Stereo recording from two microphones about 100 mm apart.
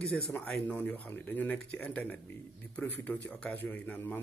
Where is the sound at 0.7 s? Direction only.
20° left (ahead or behind).